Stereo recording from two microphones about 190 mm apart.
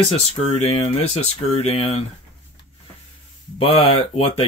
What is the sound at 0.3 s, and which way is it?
Speech, 30° left (ahead or behind).